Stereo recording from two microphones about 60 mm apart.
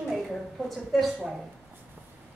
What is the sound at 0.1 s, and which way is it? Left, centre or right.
A woman's voice, centre.